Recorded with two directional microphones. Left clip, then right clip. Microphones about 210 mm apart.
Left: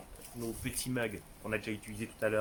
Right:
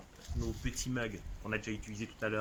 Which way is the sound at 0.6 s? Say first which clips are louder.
Left 3 dB; 10° left (ahead or behind).